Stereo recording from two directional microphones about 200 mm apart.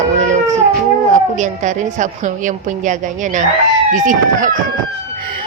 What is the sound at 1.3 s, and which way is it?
A woman's voice, 35° right (ahead or behind).